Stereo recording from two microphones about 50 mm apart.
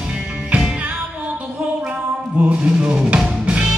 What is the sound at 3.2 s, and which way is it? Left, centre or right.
Music, centre.